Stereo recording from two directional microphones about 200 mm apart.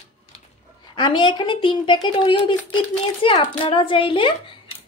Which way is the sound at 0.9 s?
25° left (ahead or behind).